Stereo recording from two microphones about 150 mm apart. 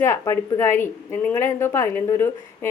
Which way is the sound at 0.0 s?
20° left (ahead or behind).